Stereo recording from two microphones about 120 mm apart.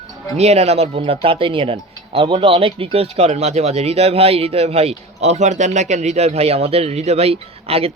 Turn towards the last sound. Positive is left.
turn(degrees=-55)  # may be behind; listen again after turning